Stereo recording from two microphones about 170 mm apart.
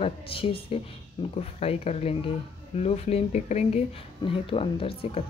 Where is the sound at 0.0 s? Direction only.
35° left (ahead or behind).